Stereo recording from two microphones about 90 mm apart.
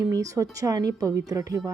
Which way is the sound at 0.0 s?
40° right (ahead or behind).